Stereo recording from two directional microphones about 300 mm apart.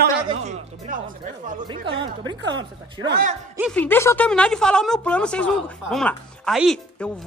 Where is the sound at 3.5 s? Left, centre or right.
Centre.